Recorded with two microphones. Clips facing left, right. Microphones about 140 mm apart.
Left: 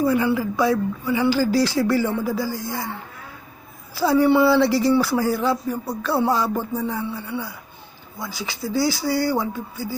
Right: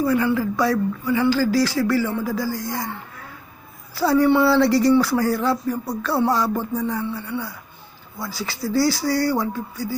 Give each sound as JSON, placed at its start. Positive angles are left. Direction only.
{"t": 0.0, "sound": "speech", "side_deg": 20}
{"t": 2.5, "sound": "speech", "side_deg": 25}
{"t": 4.6, "sound": "music", "side_deg": 5}